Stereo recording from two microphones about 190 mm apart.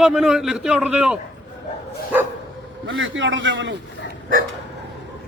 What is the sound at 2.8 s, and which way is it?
Speech, 85° right.